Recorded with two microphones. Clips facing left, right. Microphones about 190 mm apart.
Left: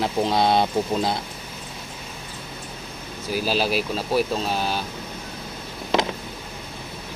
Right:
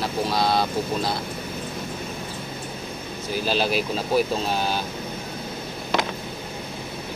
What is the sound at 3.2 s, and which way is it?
Speech, 5° left (ahead or behind).